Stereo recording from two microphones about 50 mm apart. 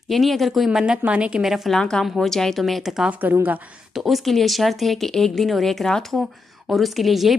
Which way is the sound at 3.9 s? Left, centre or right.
Centre.